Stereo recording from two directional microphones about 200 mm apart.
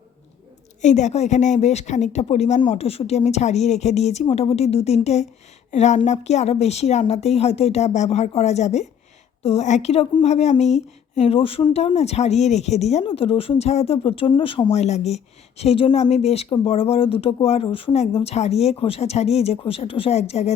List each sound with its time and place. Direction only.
0.8 s speech: 35° left (ahead or behind)